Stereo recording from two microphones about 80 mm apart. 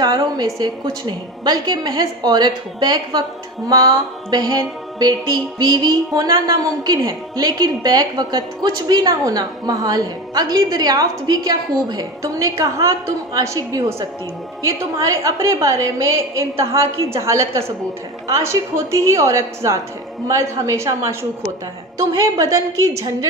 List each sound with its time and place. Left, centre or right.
0.0 s a woman's voice: right
6.4 s a woman's voice: right
12.2 s a woman's voice: right